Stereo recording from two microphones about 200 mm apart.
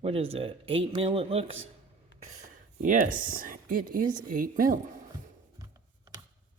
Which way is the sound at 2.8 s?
40° right (ahead or behind).